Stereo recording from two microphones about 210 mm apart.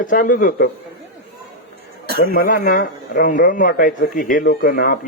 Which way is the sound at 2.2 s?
45° left (ahead or behind).